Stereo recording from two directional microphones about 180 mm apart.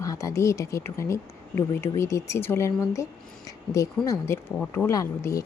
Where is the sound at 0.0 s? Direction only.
20° left (ahead or behind).